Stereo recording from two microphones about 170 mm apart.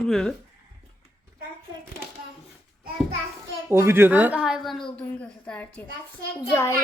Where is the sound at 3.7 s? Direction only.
15° right (ahead or behind).